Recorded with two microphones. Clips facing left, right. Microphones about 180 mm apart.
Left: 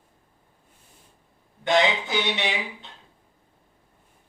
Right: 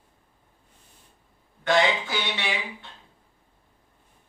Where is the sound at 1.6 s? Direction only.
20° left (ahead or behind).